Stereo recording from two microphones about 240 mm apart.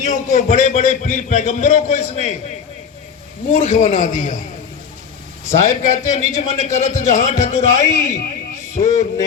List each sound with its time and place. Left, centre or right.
0.0 s a man's voice: left
3.5 s a man's voice: left
5.5 s a man's voice: left